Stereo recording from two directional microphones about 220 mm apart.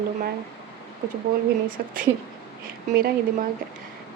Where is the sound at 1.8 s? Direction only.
40° right (ahead or behind).